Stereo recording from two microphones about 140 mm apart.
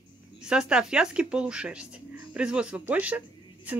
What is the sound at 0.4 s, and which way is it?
Speech, 5° right (ahead or behind).